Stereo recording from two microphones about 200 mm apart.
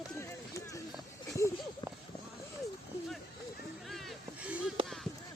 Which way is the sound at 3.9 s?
Centre (ahead or behind).